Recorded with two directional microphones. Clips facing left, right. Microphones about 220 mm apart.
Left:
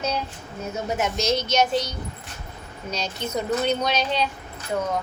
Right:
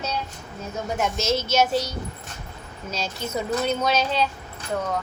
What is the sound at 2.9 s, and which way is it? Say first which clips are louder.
A woman's voice: left 1 dB; 5° right (ahead or behind).